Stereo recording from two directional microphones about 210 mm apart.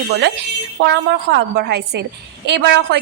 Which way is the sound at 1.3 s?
55° right (ahead or behind).